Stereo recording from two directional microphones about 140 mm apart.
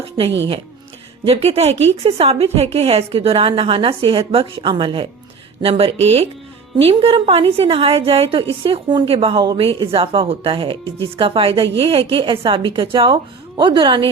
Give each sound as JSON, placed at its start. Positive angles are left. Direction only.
{"t": 1.2, "sound": "a woman's voice", "side_deg": -45}